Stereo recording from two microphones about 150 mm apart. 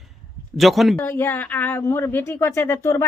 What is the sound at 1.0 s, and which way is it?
Speech, 15° left (ahead or behind).